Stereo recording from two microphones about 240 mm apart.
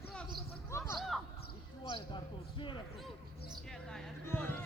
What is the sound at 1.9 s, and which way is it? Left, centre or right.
Speech, left.